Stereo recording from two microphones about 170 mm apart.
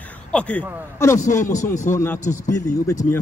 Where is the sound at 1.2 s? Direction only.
45° left (ahead or behind).